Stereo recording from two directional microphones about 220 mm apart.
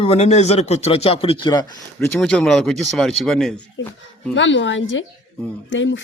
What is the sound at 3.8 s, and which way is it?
Speech, 55° left (ahead or behind).